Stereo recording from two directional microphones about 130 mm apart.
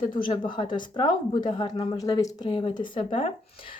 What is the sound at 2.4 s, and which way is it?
Speech, 40° left (ahead or behind).